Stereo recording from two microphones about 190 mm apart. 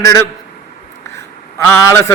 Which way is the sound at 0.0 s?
15° left (ahead or behind).